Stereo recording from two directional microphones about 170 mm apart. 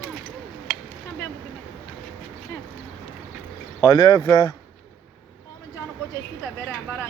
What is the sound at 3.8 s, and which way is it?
Speech, 25° left (ahead or behind).